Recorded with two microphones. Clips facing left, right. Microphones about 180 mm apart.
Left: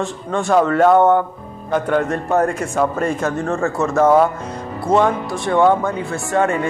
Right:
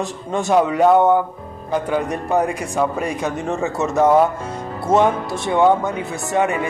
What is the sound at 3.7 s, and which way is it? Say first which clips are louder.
Speech: left 1 dB; 20° right (ahead or behind).